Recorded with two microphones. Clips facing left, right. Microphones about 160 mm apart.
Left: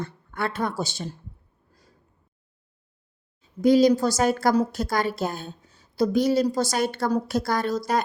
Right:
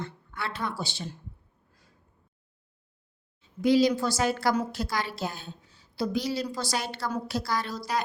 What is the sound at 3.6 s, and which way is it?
A woman's voice, 45° left (ahead or behind).